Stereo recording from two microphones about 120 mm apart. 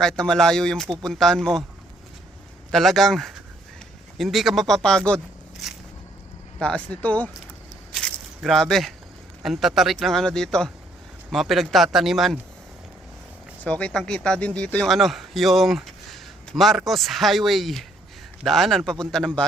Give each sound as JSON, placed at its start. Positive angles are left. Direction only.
{"t": 0.0, "sound": "speech", "side_deg": 5}
{"t": 2.7, "sound": "speech", "side_deg": 5}
{"t": 6.6, "sound": "speech", "side_deg": 10}
{"t": 7.9, "sound": "a sound", "side_deg": 0}
{"t": 9.4, "sound": "speech", "side_deg": 0}
{"t": 13.7, "sound": "speech", "side_deg": 10}